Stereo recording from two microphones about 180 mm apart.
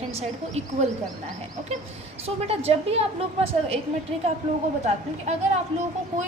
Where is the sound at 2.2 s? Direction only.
35° right (ahead or behind).